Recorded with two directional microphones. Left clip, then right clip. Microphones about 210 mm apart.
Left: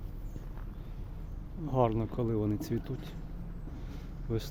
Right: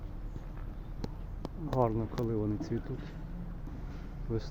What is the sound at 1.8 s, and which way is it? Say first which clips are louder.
Speech: left 2 dB; 20° left (ahead or behind).